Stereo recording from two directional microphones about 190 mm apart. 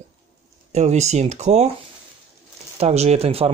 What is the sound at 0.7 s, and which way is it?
Speech, 35° right (ahead or behind).